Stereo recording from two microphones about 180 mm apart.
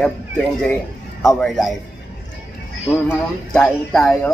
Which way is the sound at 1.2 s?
5° left (ahead or behind).